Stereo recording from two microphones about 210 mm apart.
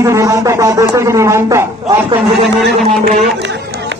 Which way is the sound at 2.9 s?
35° right (ahead or behind).